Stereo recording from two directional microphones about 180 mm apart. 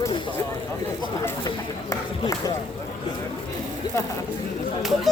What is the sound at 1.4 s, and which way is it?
Speech, 20° left (ahead or behind).